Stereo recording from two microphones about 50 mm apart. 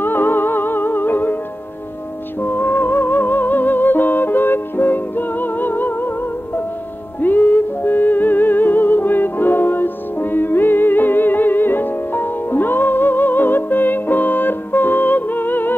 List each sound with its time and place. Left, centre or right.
0.0 s music: left
2.4 s music: left